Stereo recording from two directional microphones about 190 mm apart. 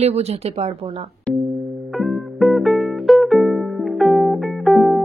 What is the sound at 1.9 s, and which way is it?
Music, centre (ahead or behind).